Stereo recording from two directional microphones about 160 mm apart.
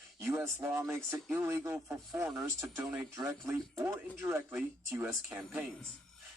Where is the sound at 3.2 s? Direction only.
15° right (ahead or behind).